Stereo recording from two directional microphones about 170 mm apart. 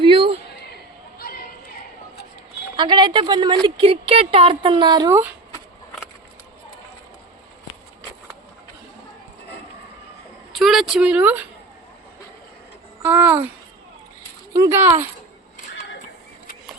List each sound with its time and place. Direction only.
0.0 s a sound: 30° right (ahead or behind)
2.7 s speech: 25° right (ahead or behind)
10.5 s speech: centre (ahead or behind)
13.0 s a child's voice: 15° right (ahead or behind)
14.5 s speech: 15° right (ahead or behind)